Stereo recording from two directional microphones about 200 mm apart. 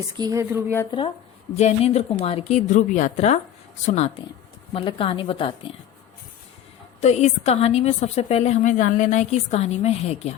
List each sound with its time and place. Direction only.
0.2 s speech: 15° right (ahead or behind)
0.9 s a woman's voice: 25° left (ahead or behind)
7.0 s a woman's voice: 35° left (ahead or behind)